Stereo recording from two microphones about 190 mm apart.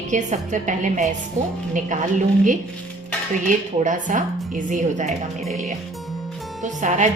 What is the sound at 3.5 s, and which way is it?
A woman's voice, 40° right (ahead or behind).